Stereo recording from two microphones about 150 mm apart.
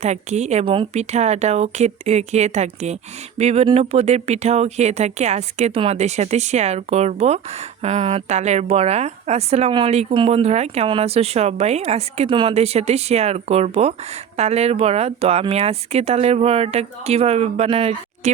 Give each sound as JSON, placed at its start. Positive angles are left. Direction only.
{"t": 0.0, "sound": "speech", "side_deg": -50}